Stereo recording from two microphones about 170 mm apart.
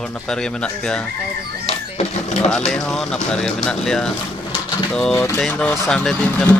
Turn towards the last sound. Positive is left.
turn(degrees=5)  # may be behind; listen again after turning